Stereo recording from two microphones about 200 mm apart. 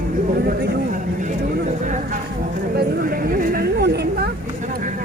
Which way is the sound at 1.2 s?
40° right (ahead or behind).